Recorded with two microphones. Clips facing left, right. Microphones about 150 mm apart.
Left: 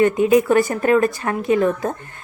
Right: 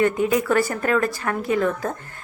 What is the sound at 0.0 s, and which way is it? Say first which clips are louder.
A woman's voice: left 5 dB; 20° left (ahead or behind).